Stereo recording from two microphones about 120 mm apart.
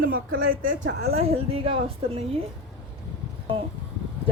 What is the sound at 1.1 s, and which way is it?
A woman's voice, 60° right (ahead or behind).